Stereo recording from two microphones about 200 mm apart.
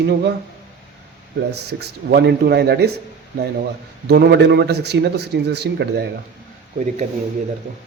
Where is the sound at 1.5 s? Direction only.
55° right (ahead or behind).